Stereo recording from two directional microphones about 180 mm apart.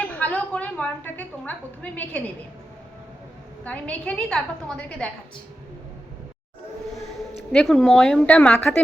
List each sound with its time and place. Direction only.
0.0 s a woman's voice: 10° left (ahead or behind)
3.6 s a woman's voice: 10° left (ahead or behind)
7.5 s a woman's voice: centre (ahead or behind)